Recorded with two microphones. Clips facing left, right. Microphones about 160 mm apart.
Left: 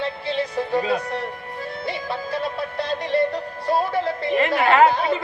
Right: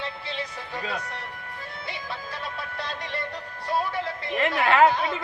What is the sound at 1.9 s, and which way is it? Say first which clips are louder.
Music: left 9 dB; 35° left (ahead or behind).